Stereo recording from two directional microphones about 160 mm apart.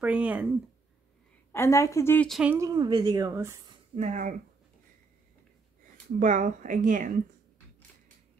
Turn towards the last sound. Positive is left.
turn(degrees=-55)  # may be behind; listen again after turning